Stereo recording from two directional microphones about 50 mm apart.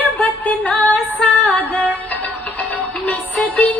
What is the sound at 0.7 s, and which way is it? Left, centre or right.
Music, left.